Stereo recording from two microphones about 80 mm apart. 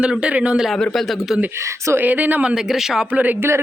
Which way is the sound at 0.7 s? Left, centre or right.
Centre.